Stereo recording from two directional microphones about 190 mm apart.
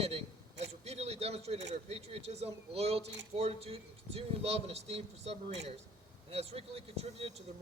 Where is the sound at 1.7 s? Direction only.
30° right (ahead or behind).